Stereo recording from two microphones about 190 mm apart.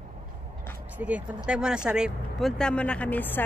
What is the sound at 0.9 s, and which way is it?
Speech, 10° right (ahead or behind).